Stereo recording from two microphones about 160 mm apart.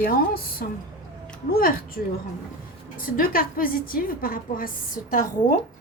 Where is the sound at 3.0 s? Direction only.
60° left (ahead or behind).